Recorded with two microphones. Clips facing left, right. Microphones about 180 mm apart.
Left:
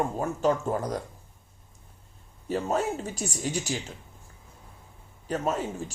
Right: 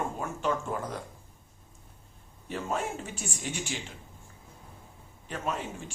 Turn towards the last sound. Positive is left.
turn(degrees=40)  # may be behind; listen again after turning